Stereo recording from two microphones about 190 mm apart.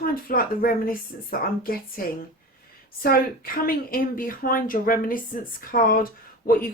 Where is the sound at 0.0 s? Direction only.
50° left (ahead or behind).